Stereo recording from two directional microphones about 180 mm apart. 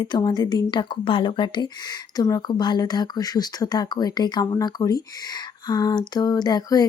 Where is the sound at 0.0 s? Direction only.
20° left (ahead or behind).